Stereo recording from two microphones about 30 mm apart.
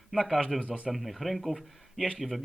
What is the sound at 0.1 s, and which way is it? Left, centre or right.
Speech, centre.